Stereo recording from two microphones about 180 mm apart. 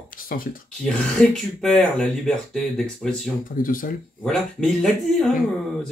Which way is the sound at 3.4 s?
50° left (ahead or behind).